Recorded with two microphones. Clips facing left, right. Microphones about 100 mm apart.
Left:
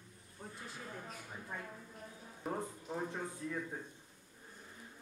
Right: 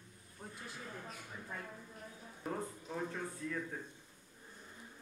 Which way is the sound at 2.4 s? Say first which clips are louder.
Left 1 dB; 15° left (ahead or behind).